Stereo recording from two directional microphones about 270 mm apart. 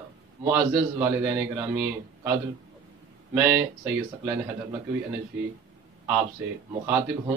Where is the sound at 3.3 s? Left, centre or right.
Centre.